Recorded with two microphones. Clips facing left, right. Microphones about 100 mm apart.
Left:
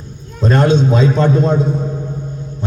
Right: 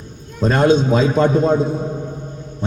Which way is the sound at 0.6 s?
10° right (ahead or behind).